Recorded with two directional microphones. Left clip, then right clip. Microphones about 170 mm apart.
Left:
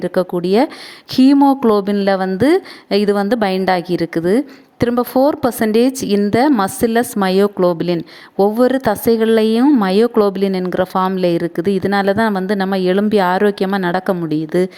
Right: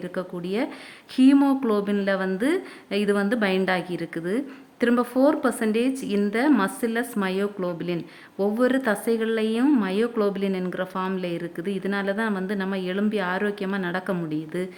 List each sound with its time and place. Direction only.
0.0 s a woman's voice: 45° left (ahead or behind)